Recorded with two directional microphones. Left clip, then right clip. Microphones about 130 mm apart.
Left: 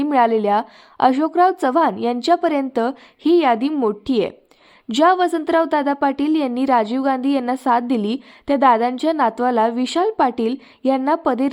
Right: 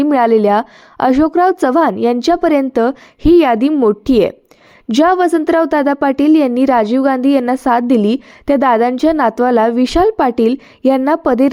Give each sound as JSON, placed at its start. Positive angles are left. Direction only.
{"t": 0.0, "sound": "a woman's voice", "side_deg": -40}